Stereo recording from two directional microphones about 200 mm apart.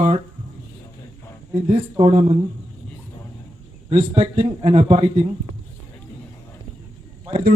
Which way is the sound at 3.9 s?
30° right (ahead or behind).